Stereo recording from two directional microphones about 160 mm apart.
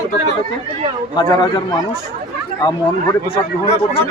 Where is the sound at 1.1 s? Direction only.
25° left (ahead or behind).